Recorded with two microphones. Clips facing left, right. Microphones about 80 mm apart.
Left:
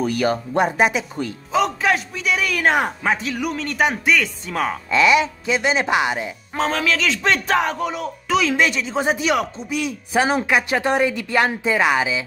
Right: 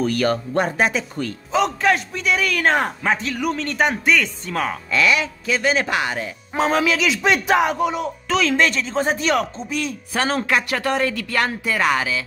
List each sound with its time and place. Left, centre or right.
0.0 s speech: centre
1.5 s a man's voice: centre
4.9 s speech: left
6.5 s speech: centre
8.3 s speech: centre